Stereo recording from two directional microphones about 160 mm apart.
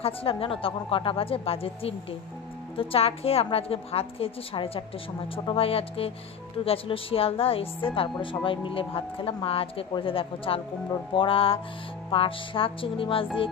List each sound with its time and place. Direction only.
0.0 s a woman's voice: 35° left (ahead or behind)